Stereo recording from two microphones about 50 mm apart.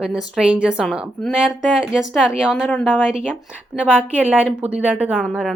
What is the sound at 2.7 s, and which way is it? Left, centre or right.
Speech, left.